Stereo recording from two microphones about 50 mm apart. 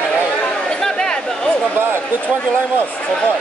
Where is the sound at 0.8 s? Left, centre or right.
Centre.